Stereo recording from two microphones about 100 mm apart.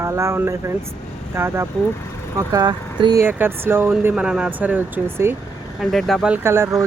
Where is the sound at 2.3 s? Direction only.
35° right (ahead or behind).